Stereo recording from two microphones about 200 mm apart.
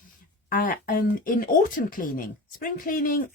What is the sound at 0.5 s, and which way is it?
Speech, 45° left (ahead or behind).